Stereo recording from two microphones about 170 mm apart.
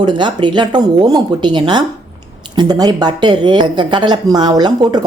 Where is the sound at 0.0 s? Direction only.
25° right (ahead or behind).